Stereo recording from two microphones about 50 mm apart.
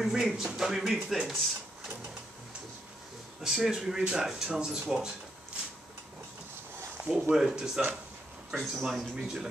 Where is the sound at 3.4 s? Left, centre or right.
Centre.